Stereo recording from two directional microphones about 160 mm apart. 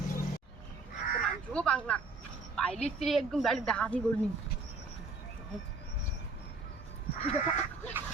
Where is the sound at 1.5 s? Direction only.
5° left (ahead or behind).